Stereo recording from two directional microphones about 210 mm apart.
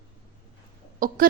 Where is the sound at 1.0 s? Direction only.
40° right (ahead or behind).